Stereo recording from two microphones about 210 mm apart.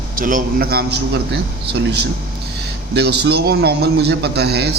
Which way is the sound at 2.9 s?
50° right (ahead or behind).